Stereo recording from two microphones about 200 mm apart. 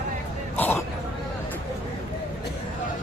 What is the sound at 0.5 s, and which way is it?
Speech, 10° left (ahead or behind).